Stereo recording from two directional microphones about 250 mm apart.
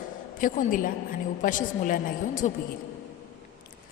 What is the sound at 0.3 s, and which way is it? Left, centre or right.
A woman's voice, left.